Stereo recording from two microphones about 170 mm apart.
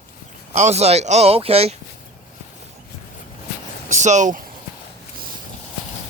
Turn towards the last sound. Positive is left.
turn(degrees=-45)  # may be behind; listen again after turning